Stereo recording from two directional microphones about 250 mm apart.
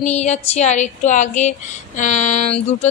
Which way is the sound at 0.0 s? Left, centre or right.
Left.